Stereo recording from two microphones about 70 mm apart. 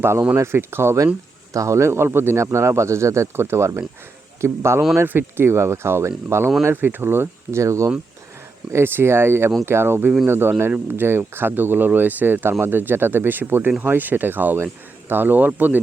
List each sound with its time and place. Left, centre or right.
0.0 s a man's voice: right
8.7 s speech: right